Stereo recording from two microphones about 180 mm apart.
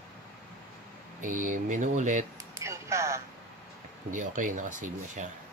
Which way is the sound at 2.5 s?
15° right (ahead or behind).